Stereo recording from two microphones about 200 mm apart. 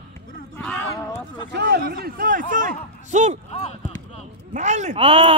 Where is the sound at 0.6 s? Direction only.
5° left (ahead or behind).